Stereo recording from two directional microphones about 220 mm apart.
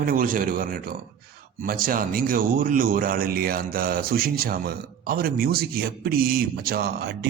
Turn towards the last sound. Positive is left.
turn(degrees=-45)  # may be behind; listen again after turning